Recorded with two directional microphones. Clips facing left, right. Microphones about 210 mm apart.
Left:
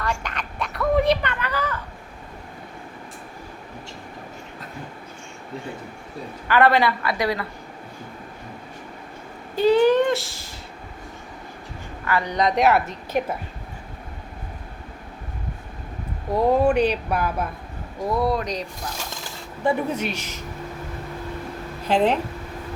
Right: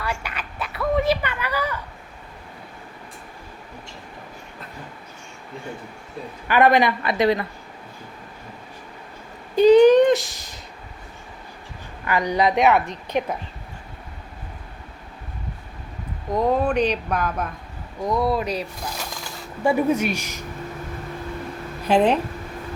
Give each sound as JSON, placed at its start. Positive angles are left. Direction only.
{"t": 0.0, "sound": "a sound", "side_deg": -10}
{"t": 6.5, "sound": "a woman's voice", "side_deg": -15}
{"t": 9.6, "sound": "a sound", "side_deg": -20}
{"t": 12.0, "sound": "a woman's voice", "side_deg": -15}
{"t": 16.3, "sound": "a woman's voice", "side_deg": 10}
{"t": 19.6, "sound": "a woman's voice", "side_deg": -10}
{"t": 21.8, "sound": "a woman's voice", "side_deg": -15}